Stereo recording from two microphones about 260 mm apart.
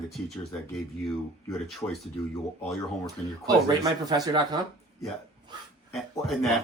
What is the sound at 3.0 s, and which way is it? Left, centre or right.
Speech, centre.